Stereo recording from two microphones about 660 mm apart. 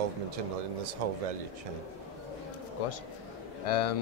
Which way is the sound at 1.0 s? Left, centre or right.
Right.